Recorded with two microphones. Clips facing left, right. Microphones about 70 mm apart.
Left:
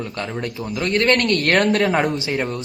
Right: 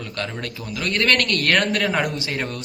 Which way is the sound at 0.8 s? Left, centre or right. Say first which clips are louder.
Left 3 dB; left.